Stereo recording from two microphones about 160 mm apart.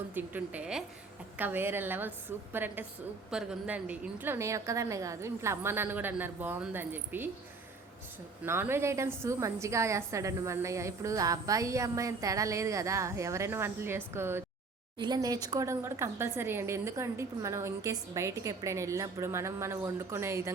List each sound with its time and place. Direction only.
0.1 s speech: 10° right (ahead or behind)
8.4 s a woman's voice: 15° right (ahead or behind)
14.9 s speech: 25° right (ahead or behind)